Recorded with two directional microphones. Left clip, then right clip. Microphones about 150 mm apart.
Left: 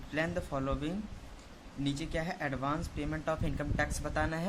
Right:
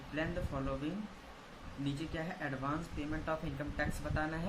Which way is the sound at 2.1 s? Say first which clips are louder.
Left 5 dB; 35° left (ahead or behind).